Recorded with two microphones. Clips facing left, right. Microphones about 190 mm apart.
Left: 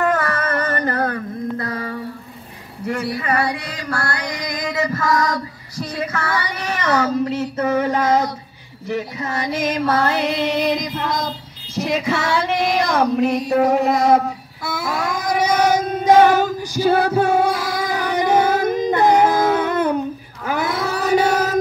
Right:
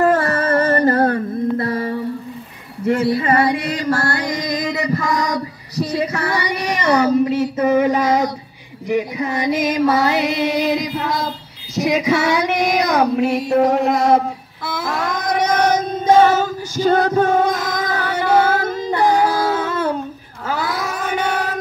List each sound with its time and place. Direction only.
0.0 s music: 35° right (ahead or behind)
2.9 s a sound: 25° right (ahead or behind); by 8.3 s 10° right (ahead or behind)
8.8 s female singing: 15° right (ahead or behind); by 14.2 s 5° left (ahead or behind)
14.8 s child singing: 5° left (ahead or behind)
20.4 s chant: 20° left (ahead or behind); by 21.5 s 40° left (ahead or behind)